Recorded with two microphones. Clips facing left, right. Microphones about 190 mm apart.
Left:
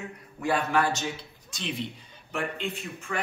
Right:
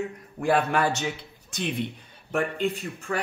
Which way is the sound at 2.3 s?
40° right (ahead or behind).